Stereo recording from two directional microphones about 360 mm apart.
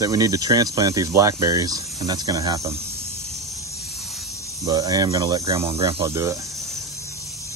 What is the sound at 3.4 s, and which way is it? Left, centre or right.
Snake, centre.